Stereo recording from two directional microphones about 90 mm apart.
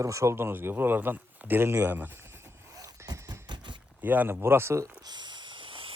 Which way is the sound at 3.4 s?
55° right (ahead or behind).